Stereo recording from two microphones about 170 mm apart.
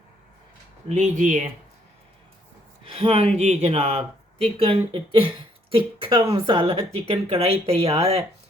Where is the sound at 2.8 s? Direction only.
35° right (ahead or behind).